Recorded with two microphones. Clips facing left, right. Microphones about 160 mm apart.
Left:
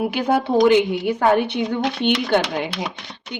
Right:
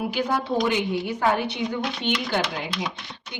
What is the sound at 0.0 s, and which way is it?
A woman's voice, 60° left (ahead or behind).